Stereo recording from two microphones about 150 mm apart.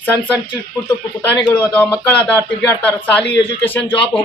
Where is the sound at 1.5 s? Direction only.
10° left (ahead or behind).